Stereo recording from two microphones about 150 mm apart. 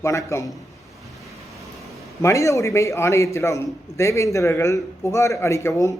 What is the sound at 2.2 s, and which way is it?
A man's voice, 20° left (ahead or behind).